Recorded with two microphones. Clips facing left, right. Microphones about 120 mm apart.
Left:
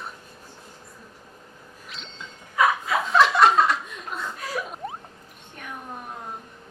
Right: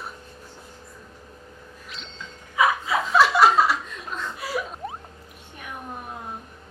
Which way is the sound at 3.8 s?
5° left (ahead or behind).